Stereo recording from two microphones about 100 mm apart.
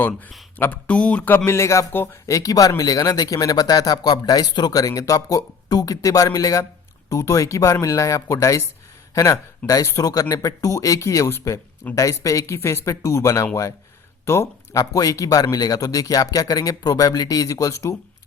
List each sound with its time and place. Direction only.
0.1 s speech: centre (ahead or behind)
0.6 s speech: 15° left (ahead or behind)
1.5 s a man's voice: 30° left (ahead or behind)